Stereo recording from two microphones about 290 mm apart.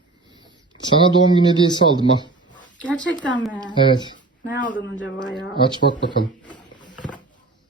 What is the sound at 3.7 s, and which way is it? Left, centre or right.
Speech, centre.